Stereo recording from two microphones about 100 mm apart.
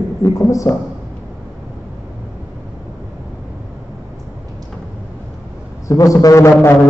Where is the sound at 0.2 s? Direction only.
35° left (ahead or behind).